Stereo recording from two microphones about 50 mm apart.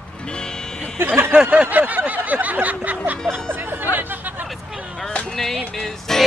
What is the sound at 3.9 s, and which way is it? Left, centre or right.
Chatter, right.